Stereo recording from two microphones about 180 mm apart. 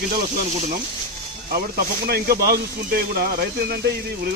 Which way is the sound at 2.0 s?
60° right (ahead or behind).